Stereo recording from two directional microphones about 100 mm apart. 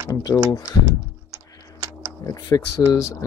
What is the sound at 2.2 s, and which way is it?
Speech, 35° left (ahead or behind).